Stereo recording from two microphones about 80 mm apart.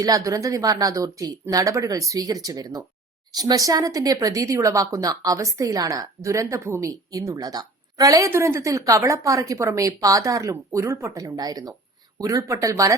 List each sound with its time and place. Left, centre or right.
0.0 s speech: right
7.1 s a woman's voice: right
8.3 s a woman's voice: right
12.2 s speech: right